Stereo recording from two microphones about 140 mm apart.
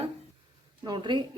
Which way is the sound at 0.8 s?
30° right (ahead or behind).